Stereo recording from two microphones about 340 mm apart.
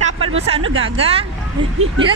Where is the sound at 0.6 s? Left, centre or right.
Right.